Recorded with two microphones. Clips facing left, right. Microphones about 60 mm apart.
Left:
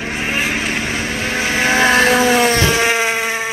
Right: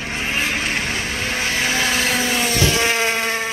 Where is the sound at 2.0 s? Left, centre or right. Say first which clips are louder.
Left 8 dB; left.